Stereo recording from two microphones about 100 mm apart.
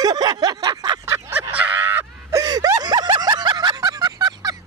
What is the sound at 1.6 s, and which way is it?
Honk, 15° right (ahead or behind).